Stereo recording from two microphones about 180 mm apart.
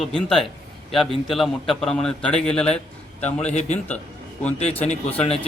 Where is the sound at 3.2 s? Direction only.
40° left (ahead or behind).